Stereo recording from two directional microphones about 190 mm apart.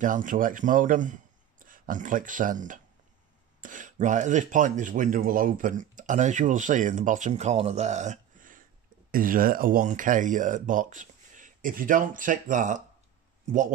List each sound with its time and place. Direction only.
0.0 s speech: 45° right (ahead or behind)